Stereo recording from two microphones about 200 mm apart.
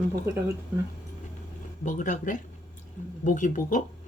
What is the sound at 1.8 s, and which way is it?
Speech, 40° left (ahead or behind).